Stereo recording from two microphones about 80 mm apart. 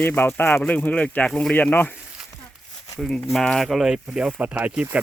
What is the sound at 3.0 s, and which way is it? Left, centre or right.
Speech, centre.